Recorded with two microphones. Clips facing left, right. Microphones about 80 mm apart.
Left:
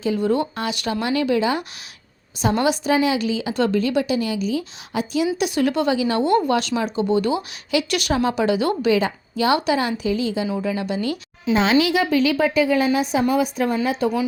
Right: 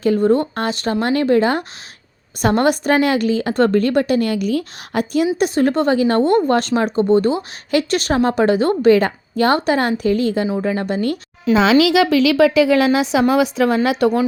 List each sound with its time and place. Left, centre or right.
0.2 s a woman's voice: right
5.4 s a woman's voice: right
11.8 s a woman's voice: right